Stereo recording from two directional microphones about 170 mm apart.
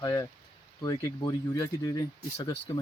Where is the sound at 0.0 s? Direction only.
20° left (ahead or behind).